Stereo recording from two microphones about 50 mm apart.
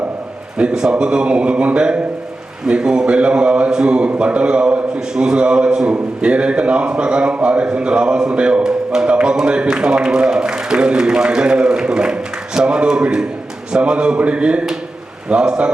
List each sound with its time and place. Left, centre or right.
0.6 s speech: centre